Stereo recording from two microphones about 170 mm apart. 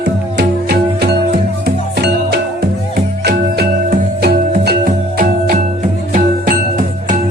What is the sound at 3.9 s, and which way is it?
Music, 50° right (ahead or behind).